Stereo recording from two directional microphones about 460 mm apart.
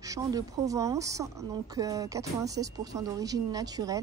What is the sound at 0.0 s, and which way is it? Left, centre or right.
Speech, centre.